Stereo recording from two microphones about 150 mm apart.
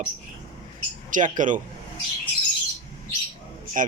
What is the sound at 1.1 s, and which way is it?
Speech, 60° right (ahead or behind).